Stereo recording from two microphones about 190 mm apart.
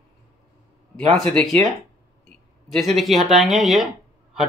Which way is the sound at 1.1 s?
5° left (ahead or behind).